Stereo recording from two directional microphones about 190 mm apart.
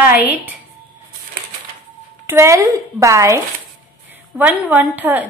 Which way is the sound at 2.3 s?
15° right (ahead or behind).